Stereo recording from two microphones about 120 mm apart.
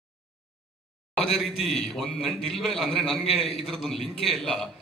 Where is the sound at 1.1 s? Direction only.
Centre (ahead or behind).